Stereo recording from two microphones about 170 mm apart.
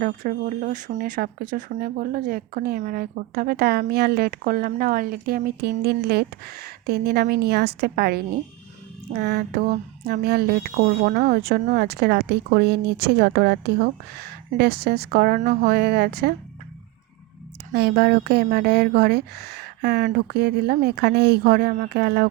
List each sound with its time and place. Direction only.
0.0 s speech: 55° right (ahead or behind)
17.7 s speech: 75° right (ahead or behind)